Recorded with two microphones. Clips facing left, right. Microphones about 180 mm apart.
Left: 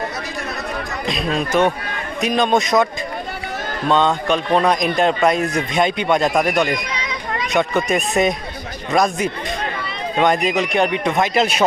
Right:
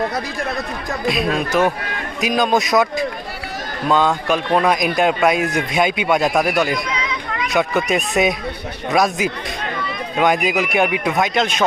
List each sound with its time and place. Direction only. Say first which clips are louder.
1.0 s a man's voice: right 3 dB; 5° right (ahead or behind)
3.8 s a man's voice: even; 5° right (ahead or behind)
6.9 s children playing: right 1 dB; 35° left (ahead or behind)
7.5 s a man's voice: even; 5° right (ahead or behind)
11.3 s speech: left 2 dB; 5° left (ahead or behind)